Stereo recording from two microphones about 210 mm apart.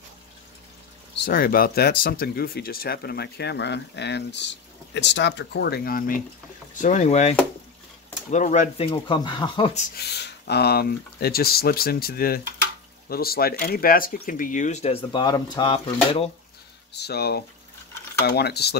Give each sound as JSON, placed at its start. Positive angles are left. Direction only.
{"t": 1.2, "sound": "speech", "side_deg": 45}
{"t": 9.9, "sound": "speech", "side_deg": 50}
{"t": 16.9, "sound": "speech", "side_deg": 50}